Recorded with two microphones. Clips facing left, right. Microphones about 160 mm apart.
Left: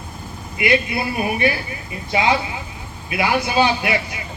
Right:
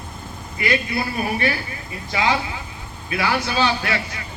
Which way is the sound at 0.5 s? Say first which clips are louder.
Left 3 dB; 20° left (ahead or behind).